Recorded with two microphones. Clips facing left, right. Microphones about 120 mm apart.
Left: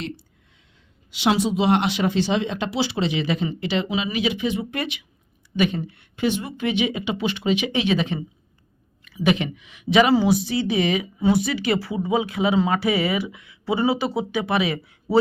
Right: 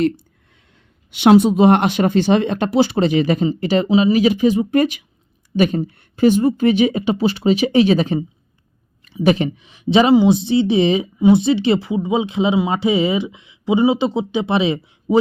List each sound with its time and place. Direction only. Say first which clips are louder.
1.1 s speech: right 9 dB; 55° right (ahead or behind); by 8.2 s 40° right (ahead or behind)
9.2 s speech: right 5 dB; 35° right (ahead or behind); by 15.2 s 20° right (ahead or behind)